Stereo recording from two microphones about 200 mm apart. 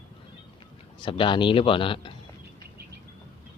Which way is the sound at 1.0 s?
25° left (ahead or behind).